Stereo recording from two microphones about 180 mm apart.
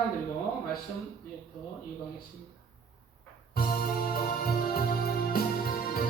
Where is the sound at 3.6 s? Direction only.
55° left (ahead or behind).